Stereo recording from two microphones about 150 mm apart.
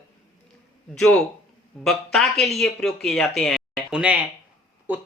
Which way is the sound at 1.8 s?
Centre (ahead or behind).